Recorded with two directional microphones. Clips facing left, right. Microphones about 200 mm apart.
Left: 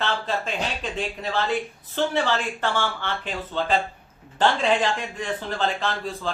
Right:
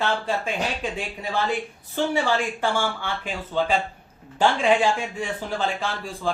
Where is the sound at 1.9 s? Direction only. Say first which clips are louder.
Right 1 dB; 10° right (ahead or behind).